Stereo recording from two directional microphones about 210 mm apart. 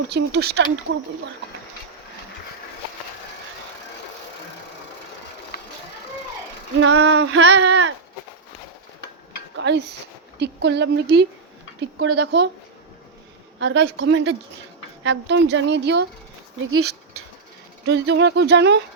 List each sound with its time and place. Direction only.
0.1 s speech: 50° right (ahead or behind)
6.7 s a sound: 70° right (ahead or behind); by 7.8 s 55° right (ahead or behind)
9.6 s speech: 55° right (ahead or behind)
11.9 s a sound: 90° right; by 12.5 s 75° right (ahead or behind)
13.6 s a woman's voice: 60° right (ahead or behind)
16.6 s dog: 90° right
17.8 s a woman's voice: 55° right (ahead or behind)